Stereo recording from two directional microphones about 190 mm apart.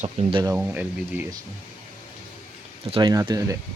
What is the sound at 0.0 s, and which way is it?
Speech, 30° right (ahead or behind).